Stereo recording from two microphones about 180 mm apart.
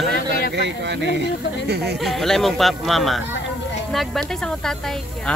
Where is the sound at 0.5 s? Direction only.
75° right (ahead or behind).